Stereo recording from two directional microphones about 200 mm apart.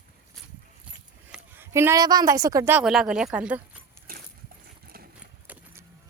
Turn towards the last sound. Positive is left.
turn(degrees=-5)  # may be behind; listen again after turning